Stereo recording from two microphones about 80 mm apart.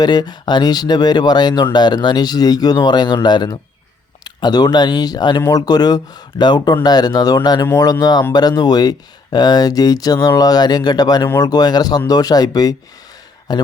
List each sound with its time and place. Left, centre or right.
0.0 s speech: left